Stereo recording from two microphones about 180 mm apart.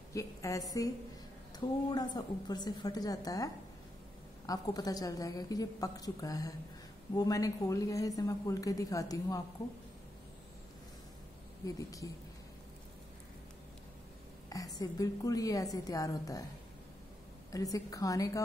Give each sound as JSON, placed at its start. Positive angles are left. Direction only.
{"t": 0.1, "sound": "a woman's voice", "side_deg": 20}
{"t": 11.6, "sound": "a woman's voice", "side_deg": 20}
{"t": 14.5, "sound": "a woman's voice", "side_deg": 20}
{"t": 17.5, "sound": "a woman's voice", "side_deg": 20}